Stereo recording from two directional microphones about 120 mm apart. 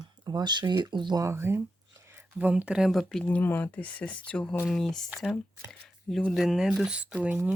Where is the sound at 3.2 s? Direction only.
15° left (ahead or behind).